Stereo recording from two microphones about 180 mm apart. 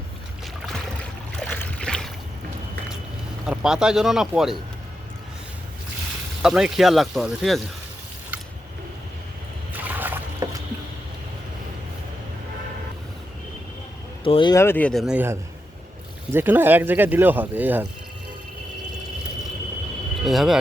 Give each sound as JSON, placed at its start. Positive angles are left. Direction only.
{"t": 1.5, "sound": "boat", "side_deg": 10}
{"t": 3.4, "sound": "speech", "side_deg": -5}
{"t": 6.4, "sound": "speech", "side_deg": -5}
{"t": 9.8, "sound": "rowboat", "side_deg": -10}
{"t": 14.3, "sound": "speech", "side_deg": 30}
{"t": 14.5, "sound": "speech", "side_deg": 15}
{"t": 20.2, "sound": "speech", "side_deg": 0}